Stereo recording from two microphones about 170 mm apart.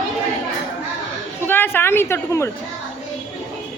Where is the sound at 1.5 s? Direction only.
10° left (ahead or behind).